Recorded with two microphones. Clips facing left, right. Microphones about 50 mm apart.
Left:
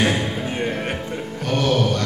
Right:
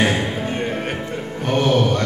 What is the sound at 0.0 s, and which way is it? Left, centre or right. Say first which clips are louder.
Music: right 1 dB; centre.